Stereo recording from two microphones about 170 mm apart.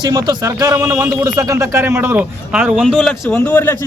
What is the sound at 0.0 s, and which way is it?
A man's voice, 20° right (ahead or behind).